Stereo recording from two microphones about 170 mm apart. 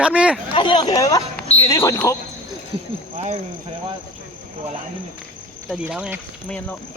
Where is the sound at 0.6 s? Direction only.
25° left (ahead or behind).